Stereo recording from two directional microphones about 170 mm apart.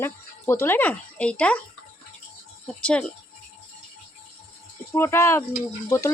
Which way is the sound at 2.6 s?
5° left (ahead or behind).